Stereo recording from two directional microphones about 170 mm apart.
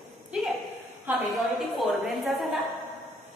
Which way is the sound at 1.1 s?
10° right (ahead or behind).